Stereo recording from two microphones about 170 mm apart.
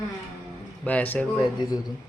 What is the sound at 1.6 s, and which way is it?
Speech, 25° left (ahead or behind).